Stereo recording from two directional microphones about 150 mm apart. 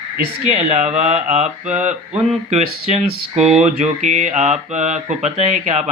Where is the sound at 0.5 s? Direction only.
50° right (ahead or behind).